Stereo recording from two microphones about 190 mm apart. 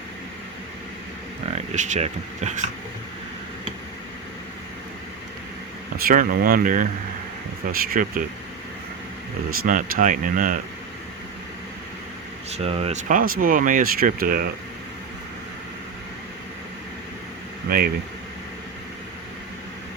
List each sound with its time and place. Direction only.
1.5 s speech: 40° right (ahead or behind)
6.0 s speech: 50° right (ahead or behind)
9.6 s speech: 45° right (ahead or behind)
12.5 s speech: 30° right (ahead or behind); by 14.5 s 50° right (ahead or behind)
17.7 s speech: 50° right (ahead or behind)